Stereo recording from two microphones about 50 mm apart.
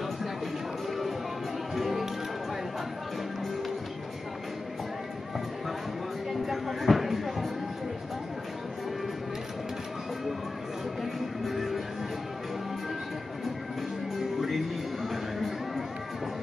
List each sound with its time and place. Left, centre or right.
1.8 s music: centre
6.4 s a sound: centre
11.1 s music: centre
15.0 s music: centre